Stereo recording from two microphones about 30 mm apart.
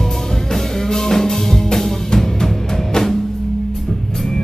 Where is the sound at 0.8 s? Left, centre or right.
Centre.